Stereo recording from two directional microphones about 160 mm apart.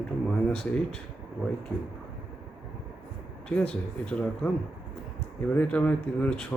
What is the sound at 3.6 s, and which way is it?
Speech, 5° left (ahead or behind).